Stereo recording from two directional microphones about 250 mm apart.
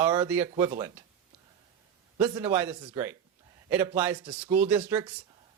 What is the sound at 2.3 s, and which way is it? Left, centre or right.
Speech, centre.